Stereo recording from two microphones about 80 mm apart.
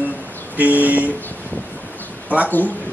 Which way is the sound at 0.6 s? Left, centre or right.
Right.